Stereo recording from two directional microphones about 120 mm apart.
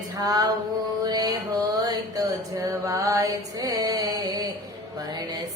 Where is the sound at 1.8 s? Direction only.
30° right (ahead or behind).